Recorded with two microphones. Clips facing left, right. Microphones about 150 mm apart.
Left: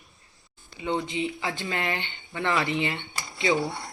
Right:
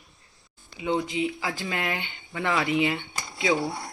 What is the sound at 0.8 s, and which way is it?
Speech, 5° right (ahead or behind).